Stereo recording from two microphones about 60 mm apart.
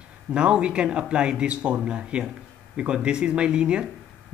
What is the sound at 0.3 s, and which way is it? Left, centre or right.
Speech, centre.